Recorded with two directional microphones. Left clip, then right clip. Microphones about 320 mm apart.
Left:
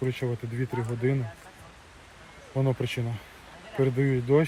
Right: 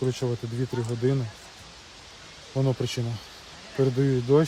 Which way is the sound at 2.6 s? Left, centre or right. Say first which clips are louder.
Right 1 dB; centre.